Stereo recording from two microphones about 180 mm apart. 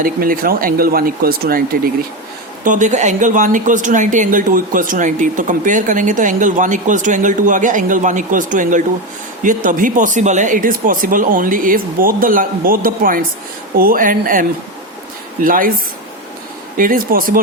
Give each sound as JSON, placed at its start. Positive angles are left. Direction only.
{"t": 0.0, "sound": "speech", "side_deg": -55}
{"t": 2.6, "sound": "speech", "side_deg": -45}
{"t": 16.7, "sound": "speech", "side_deg": -50}